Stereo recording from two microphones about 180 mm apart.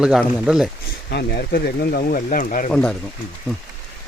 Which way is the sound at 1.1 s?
60° left (ahead or behind).